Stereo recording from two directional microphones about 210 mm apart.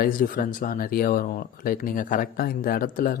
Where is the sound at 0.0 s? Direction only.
40° left (ahead or behind).